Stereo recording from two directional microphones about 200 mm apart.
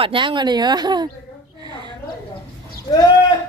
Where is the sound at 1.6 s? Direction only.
20° right (ahead or behind).